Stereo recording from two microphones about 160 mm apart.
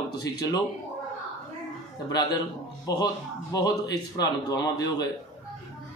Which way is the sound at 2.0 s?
25° left (ahead or behind).